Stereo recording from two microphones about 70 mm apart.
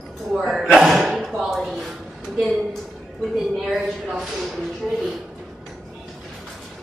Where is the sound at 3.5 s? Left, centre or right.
Centre.